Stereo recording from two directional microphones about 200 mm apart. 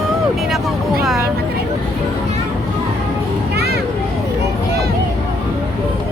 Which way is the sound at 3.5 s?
55° right (ahead or behind).